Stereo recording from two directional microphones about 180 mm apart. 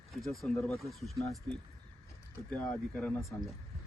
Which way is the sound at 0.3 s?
5° left (ahead or behind).